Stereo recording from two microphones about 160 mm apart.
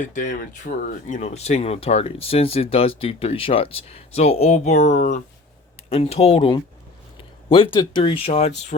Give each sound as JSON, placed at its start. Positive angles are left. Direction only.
{"t": 0.1, "sound": "speech", "side_deg": 50}